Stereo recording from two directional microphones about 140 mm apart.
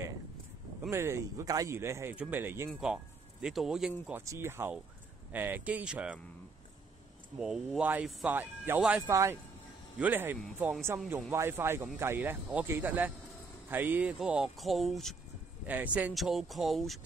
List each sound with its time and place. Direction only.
0.8 s speech: 20° right (ahead or behind)
2.8 s speech: 5° right (ahead or behind)
4.1 s speech: 20° right (ahead or behind)
7.3 s speech: 5° right (ahead or behind)
9.0 s speech: 20° right (ahead or behind); by 15.1 s centre (ahead or behind)
15.6 s speech: 10° right (ahead or behind)
16.1 s speech: centre (ahead or behind)